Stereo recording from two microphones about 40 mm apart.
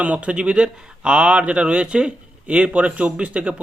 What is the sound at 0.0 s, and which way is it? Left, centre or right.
Speech, right.